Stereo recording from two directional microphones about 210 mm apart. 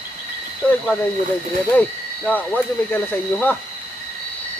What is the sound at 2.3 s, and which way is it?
Speech, 10° left (ahead or behind).